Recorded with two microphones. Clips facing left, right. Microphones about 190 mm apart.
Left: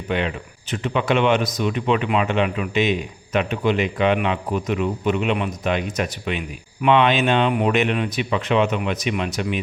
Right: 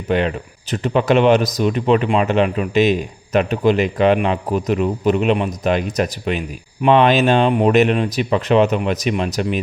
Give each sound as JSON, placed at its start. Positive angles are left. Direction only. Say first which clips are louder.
{"t": 0.1, "sound": "a man's voice", "louder": "right 6 dB", "side_deg": -40}